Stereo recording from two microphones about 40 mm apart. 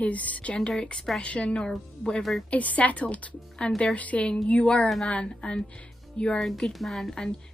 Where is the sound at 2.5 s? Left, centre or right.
Left.